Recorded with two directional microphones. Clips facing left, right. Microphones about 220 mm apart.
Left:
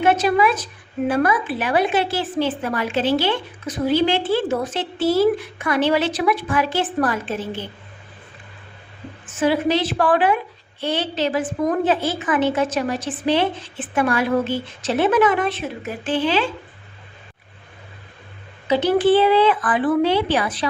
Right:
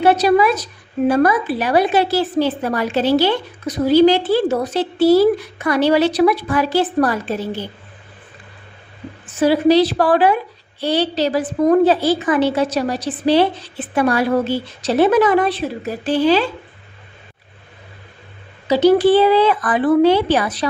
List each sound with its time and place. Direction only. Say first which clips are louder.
0.0 s a woman's voice: right 4 dB; 35° right (ahead or behind)
9.4 s a woman's voice: right 6 dB; 35° right (ahead or behind)
18.7 s a woman's voice: right 4 dB; 40° right (ahead or behind)